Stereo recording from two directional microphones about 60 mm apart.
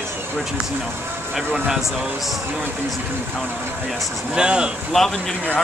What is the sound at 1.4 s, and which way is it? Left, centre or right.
Speech, centre.